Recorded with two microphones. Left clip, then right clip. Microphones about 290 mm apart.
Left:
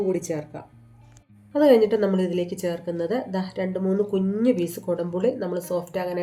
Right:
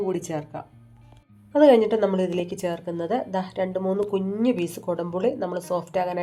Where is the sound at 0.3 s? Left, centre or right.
Centre.